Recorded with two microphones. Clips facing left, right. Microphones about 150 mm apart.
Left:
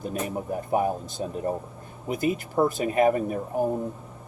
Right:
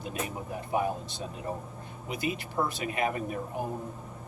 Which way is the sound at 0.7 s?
45° left (ahead or behind).